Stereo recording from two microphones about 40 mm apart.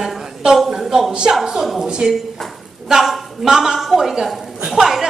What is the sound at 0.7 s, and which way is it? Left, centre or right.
A woman's voice, centre.